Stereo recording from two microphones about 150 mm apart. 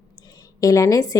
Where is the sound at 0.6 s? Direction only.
20° left (ahead or behind).